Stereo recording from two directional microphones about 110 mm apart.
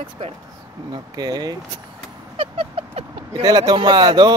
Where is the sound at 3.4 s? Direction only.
40° right (ahead or behind).